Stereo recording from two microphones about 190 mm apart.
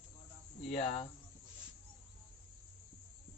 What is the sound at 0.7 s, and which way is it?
Speech, 35° left (ahead or behind).